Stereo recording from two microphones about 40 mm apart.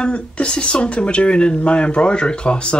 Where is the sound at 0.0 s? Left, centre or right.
Left.